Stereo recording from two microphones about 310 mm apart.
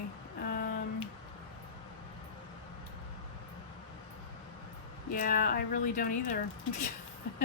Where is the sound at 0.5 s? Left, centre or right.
Left.